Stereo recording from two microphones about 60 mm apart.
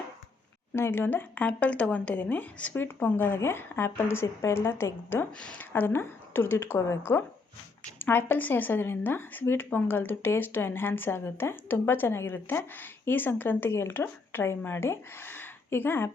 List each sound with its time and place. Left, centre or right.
0.8 s speech: left
1.5 s a woman's voice: left